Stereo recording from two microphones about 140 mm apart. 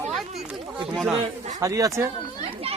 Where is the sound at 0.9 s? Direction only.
Centre (ahead or behind).